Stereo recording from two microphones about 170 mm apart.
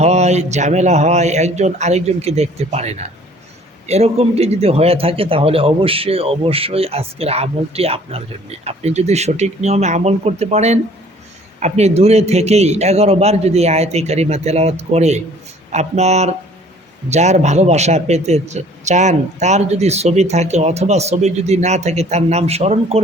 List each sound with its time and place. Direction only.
0.0 s a man's voice: 40° right (ahead or behind)